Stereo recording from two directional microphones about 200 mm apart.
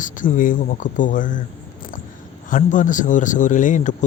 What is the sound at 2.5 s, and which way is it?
Speech, 40° left (ahead or behind).